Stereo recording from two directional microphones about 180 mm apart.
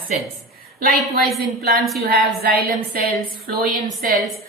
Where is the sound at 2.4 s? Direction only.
55° right (ahead or behind).